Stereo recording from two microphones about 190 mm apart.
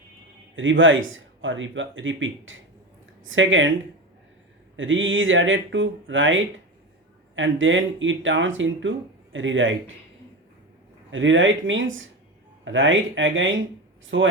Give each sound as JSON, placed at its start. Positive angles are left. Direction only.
{"t": 0.5, "sound": "speech", "side_deg": -90}
{"t": 4.8, "sound": "speech", "side_deg": -90}
{"t": 11.1, "sound": "speech", "side_deg": -90}